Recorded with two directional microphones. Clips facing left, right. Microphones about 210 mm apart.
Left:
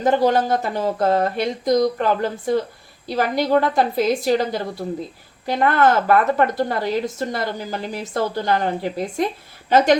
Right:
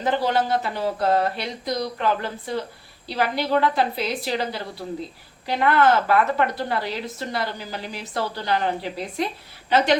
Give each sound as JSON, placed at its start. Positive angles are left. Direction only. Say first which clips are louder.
{"t": 0.0, "sound": "a woman's voice", "louder": "left 5 dB", "side_deg": 45}